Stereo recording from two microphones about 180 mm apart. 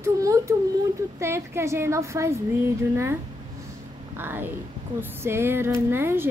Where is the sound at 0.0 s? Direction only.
15° right (ahead or behind).